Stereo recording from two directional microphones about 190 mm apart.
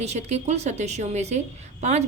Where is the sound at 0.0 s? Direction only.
35° right (ahead or behind).